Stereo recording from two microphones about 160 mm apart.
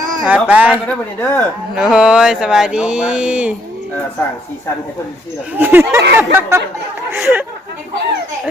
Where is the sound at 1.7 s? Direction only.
5° right (ahead or behind).